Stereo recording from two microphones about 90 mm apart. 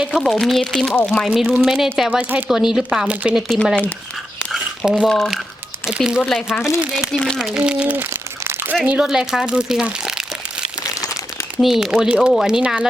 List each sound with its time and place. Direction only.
0.0 s speech: centre (ahead or behind)
1.3 s speech: 10° right (ahead or behind)
3.5 s speech: centre (ahead or behind)
4.8 s speech: 5° right (ahead or behind)
7.1 s speech: 5° left (ahead or behind)
7.6 s speech: 15° right (ahead or behind)
8.1 s crumpling: 25° right (ahead or behind)
8.9 s speech: 10° right (ahead or behind)
11.6 s speech: 5° right (ahead or behind)